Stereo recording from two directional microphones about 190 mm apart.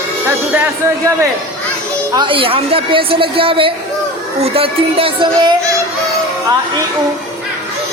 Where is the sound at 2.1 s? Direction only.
25° right (ahead or behind).